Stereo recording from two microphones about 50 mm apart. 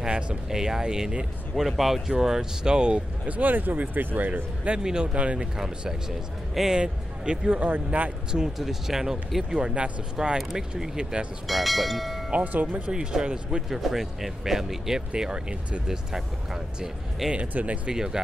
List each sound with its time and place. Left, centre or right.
0.0 s speech: centre
1.5 s speech: centre
3.3 s speech: right
4.6 s speech: centre
6.5 s speech: centre
6.8 s speech: centre
7.6 s speech: right
8.5 s speech: centre
11.4 s speech: centre
12.3 s speech: right
17.2 s speech: centre